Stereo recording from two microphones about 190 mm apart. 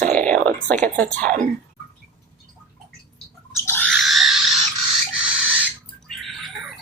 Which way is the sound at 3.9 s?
Centre (ahead or behind).